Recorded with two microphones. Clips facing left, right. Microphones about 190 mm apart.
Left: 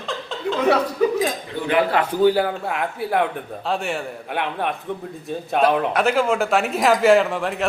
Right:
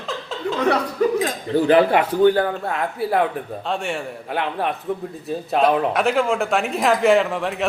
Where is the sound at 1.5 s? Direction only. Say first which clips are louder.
Right 7 dB; 35° right (ahead or behind).